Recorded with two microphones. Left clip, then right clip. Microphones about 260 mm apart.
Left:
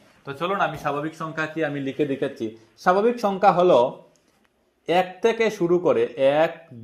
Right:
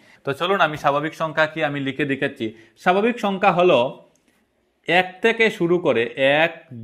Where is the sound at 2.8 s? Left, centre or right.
Right.